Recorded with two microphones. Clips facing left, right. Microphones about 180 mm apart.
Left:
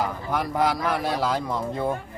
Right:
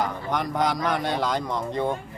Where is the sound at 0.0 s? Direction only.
5° left (ahead or behind).